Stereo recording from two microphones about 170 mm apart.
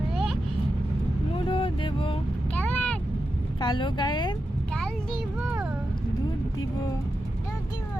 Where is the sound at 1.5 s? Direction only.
30° left (ahead or behind).